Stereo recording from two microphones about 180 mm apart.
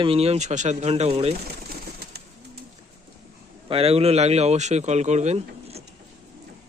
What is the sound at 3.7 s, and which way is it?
Speech, 35° right (ahead or behind).